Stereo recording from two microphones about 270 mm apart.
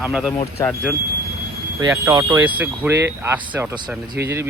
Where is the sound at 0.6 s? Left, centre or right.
Centre.